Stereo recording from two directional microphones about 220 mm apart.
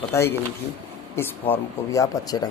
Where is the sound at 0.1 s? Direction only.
10° left (ahead or behind).